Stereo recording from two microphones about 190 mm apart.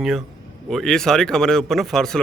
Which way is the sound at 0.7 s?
Centre (ahead or behind).